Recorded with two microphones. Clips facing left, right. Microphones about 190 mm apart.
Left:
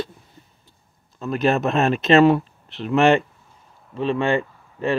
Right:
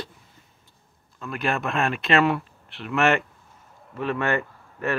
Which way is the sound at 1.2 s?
25° left (ahead or behind).